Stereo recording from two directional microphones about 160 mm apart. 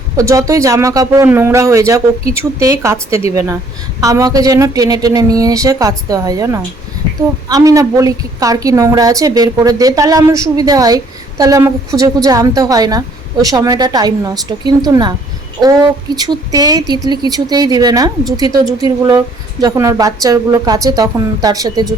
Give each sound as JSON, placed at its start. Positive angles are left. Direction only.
{"t": 0.2, "sound": "a woman's voice", "side_deg": -20}